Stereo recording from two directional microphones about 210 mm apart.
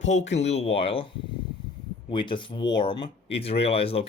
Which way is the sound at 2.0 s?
25° left (ahead or behind).